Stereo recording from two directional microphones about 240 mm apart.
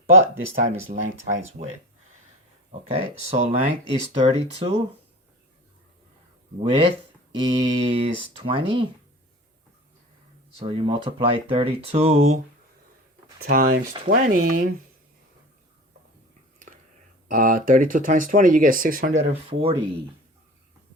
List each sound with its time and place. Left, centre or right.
0.9 s speech: right
2.9 s speech: right
6.6 s speech: right
10.6 s speech: right
13.5 s speech: right
17.2 s speech: right